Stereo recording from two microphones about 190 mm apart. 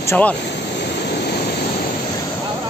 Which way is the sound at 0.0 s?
10° left (ahead or behind).